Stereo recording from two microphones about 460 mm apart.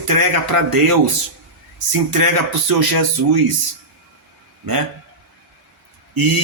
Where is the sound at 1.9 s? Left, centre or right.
Right.